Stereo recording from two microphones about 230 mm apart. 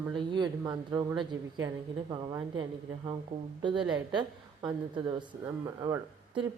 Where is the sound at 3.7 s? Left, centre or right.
Centre.